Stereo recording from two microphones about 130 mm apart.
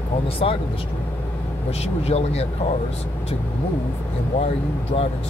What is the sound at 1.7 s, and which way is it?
Speech, 50° left (ahead or behind).